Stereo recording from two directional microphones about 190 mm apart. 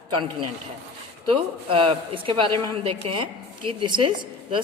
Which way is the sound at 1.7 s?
25° right (ahead or behind).